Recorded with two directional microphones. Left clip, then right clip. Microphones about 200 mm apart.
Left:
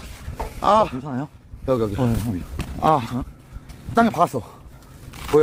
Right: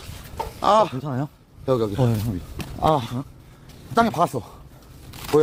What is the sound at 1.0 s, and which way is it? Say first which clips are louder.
Speech: right 1 dB; 35° right (ahead or behind).